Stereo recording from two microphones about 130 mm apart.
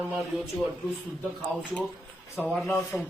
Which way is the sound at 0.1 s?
Centre (ahead or behind).